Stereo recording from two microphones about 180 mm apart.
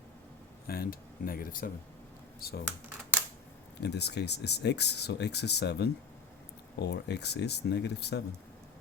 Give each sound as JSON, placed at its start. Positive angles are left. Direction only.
{"t": 0.7, "sound": "speech", "side_deg": 55}
{"t": 3.8, "sound": "speech", "side_deg": 65}